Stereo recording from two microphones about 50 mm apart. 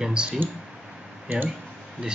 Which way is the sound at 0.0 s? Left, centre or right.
Centre.